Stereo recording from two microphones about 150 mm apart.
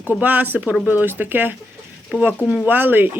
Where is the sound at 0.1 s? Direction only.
10° right (ahead or behind).